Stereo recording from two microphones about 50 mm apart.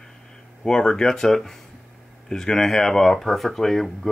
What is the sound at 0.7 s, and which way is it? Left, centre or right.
Speech, centre.